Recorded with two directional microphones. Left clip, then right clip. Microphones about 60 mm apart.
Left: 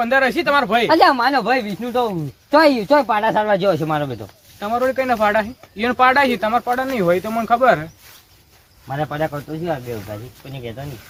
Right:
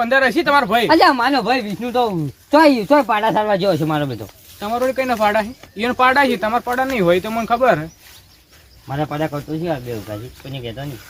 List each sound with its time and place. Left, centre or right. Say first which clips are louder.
0.0 s speech: right 1 dB; right
0.9 s speech: left 1 dB; right
1.6 s speech: right 2 dB; right
2.9 s speech: right 1 dB; right
3.3 s speech: even; right
4.6 s speech: even; centre
6.9 s speech: right 3 dB; centre
7.6 s speech: even; right
8.9 s speech: even; centre
9.9 s speech: right 1 dB; centre